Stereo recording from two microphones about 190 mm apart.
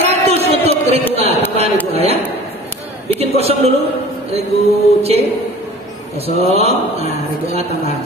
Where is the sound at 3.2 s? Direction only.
35° right (ahead or behind).